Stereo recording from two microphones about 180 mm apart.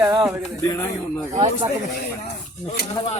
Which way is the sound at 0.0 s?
20° right (ahead or behind).